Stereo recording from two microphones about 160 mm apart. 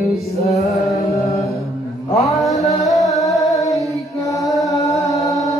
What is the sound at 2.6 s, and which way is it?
Music, 45° left (ahead or behind).